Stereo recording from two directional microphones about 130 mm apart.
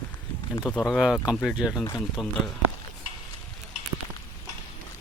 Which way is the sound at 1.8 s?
25° left (ahead or behind).